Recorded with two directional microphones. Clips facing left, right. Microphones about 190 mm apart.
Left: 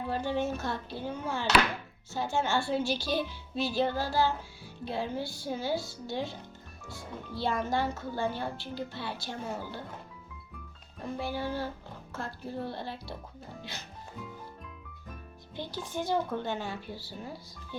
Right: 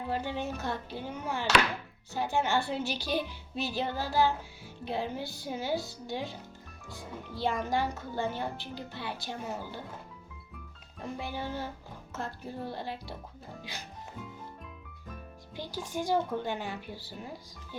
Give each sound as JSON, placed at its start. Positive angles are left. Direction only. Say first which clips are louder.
{"t": 0.1, "sound": "speech", "louder": "left 3 dB", "side_deg": -15}
{"t": 11.2, "sound": "music", "louder": "left 4 dB", "side_deg": -20}
{"t": 12.1, "sound": "speech", "louder": "left 1 dB", "side_deg": -15}
{"t": 15.7, "sound": "speech", "louder": "right 1 dB", "side_deg": -10}